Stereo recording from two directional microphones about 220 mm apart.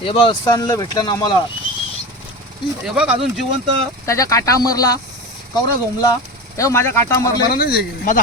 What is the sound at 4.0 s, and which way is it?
Speech, 15° left (ahead or behind).